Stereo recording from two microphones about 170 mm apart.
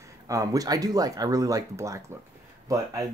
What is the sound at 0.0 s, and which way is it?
Speech, 20° right (ahead or behind).